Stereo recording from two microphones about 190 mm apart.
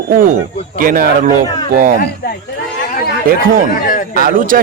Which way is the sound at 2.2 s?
55° left (ahead or behind).